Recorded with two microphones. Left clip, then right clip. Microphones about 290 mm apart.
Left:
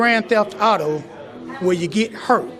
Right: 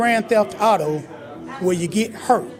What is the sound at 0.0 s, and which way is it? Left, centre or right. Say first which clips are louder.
A man's voice: left 1 dB; right.